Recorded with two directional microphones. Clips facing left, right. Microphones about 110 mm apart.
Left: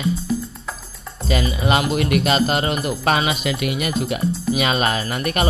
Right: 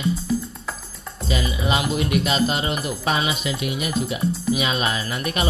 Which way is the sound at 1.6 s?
60° left (ahead or behind).